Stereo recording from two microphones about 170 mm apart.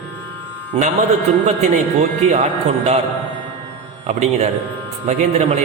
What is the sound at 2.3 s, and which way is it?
Speech, 40° right (ahead or behind).